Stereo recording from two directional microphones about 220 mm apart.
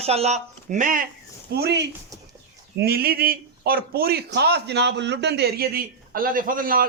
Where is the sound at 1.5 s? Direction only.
50° right (ahead or behind).